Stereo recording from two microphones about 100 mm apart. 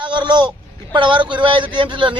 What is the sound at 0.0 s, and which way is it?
A man's voice, 50° right (ahead or behind).